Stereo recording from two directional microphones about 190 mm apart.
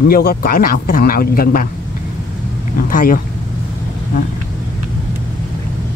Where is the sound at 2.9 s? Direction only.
45° left (ahead or behind).